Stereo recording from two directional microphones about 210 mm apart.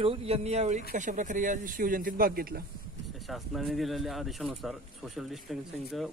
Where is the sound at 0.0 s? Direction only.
25° right (ahead or behind); by 2.6 s 45° right (ahead or behind).